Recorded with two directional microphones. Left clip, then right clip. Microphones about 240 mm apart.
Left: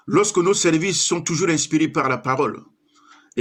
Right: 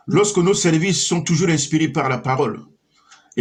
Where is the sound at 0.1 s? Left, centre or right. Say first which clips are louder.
Right 1 dB; left.